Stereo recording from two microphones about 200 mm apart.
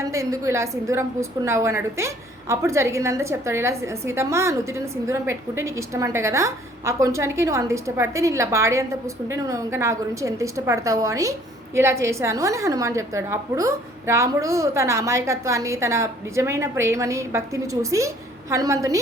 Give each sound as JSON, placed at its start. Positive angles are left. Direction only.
{"t": 0.0, "sound": "a woman's voice", "side_deg": -15}